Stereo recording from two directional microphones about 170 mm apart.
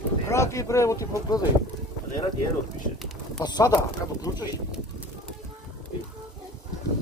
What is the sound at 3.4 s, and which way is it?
Speech, 25° left (ahead or behind).